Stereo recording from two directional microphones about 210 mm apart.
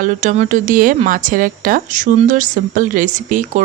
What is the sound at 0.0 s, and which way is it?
Speech, 35° right (ahead or behind).